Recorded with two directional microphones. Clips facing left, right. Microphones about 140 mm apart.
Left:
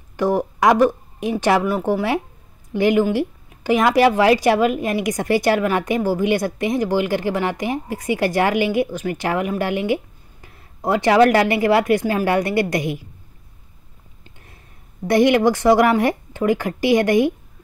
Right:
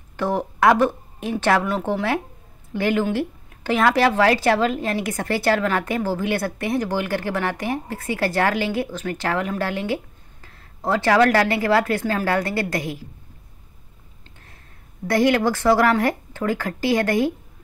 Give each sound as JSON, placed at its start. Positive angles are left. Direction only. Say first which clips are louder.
{"t": 0.2, "sound": "speech", "louder": "left 2 dB", "side_deg": 10}
{"t": 15.0, "sound": "speech", "louder": "left 4 dB", "side_deg": 20}